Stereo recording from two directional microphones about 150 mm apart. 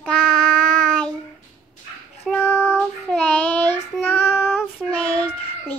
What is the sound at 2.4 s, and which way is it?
Child singing, 15° left (ahead or behind).